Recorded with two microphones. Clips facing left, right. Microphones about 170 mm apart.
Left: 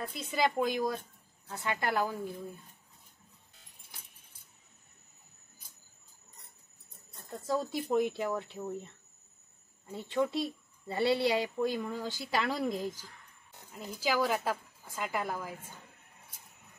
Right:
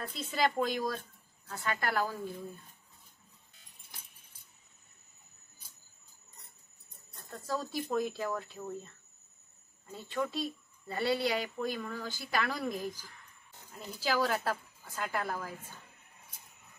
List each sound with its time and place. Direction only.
0.3 s a woman's voice: 10° left (ahead or behind)
7.2 s speech: 20° left (ahead or behind)
13.7 s a woman's voice: 10° left (ahead or behind)